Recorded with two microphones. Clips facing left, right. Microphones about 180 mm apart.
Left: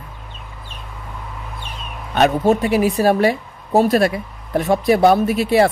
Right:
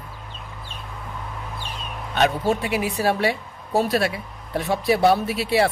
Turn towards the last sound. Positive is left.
turn(degrees=45)  # may be behind; listen again after turning